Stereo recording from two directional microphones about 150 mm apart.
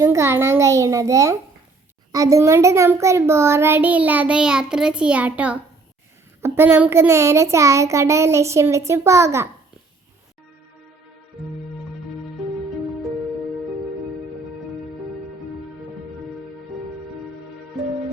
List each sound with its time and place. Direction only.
0.0 s a child's voice: 20° right (ahead or behind)
12.4 s music: centre (ahead or behind)